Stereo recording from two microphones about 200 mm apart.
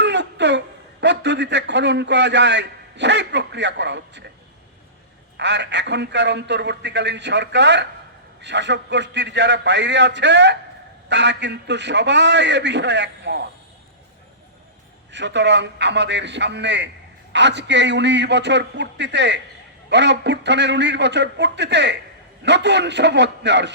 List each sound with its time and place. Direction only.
0.0 s a sound: 60° right (ahead or behind)
1.0 s a man's voice: 60° right (ahead or behind)
5.4 s speech: 60° right (ahead or behind)
15.1 s speech: 60° right (ahead or behind)